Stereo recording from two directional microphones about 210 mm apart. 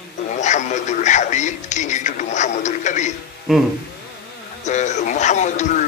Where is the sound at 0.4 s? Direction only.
35° left (ahead or behind).